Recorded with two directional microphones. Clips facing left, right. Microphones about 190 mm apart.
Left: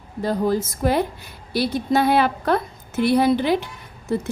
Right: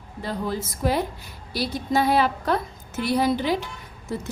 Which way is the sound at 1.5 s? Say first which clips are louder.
Left 4 dB; 60° left (ahead or behind).